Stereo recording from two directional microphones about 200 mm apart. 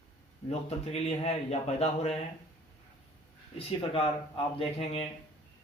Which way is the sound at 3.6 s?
30° left (ahead or behind).